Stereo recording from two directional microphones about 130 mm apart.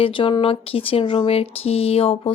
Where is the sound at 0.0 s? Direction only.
40° left (ahead or behind).